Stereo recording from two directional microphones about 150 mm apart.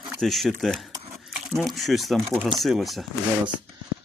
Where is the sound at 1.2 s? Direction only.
Centre (ahead or behind).